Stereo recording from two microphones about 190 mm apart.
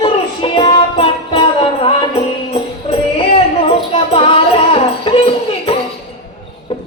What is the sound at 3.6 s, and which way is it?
Music, 30° left (ahead or behind).